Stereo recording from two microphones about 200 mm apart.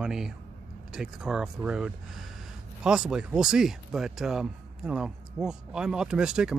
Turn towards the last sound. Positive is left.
turn(degrees=-5)  # may be behind; listen again after turning